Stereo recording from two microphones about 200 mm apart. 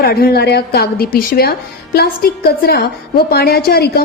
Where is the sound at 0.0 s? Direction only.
50° left (ahead or behind).